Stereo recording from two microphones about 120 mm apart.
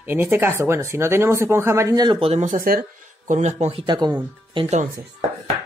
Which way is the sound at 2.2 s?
70° right (ahead or behind).